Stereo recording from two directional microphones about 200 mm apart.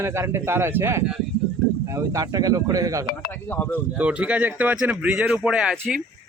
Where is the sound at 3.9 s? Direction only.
5° right (ahead or behind).